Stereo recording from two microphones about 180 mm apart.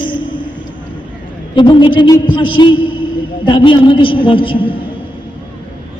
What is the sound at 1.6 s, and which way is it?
A man's voice, 25° left (ahead or behind).